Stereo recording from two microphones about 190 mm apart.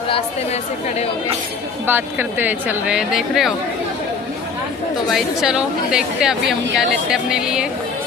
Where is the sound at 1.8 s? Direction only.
10° right (ahead or behind).